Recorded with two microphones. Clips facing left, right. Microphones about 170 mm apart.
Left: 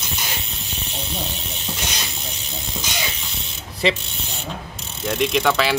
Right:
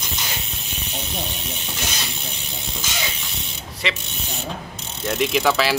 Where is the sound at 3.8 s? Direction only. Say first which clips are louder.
Left 7 dB; 35° left (ahead or behind).